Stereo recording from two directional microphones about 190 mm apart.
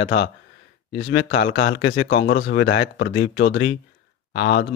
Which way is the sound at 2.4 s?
65° left (ahead or behind).